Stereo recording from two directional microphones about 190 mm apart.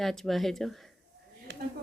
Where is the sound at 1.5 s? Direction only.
65° right (ahead or behind).